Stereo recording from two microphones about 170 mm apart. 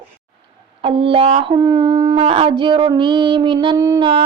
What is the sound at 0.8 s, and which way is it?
Speech, 30° right (ahead or behind).